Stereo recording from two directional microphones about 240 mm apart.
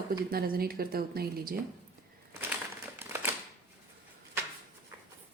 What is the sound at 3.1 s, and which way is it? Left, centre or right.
Shuffling cards, centre.